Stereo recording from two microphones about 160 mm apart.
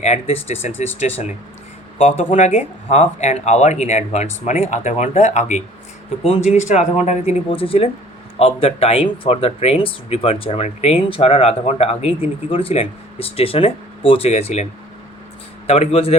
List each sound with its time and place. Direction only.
0.0 s speech: 40° left (ahead or behind)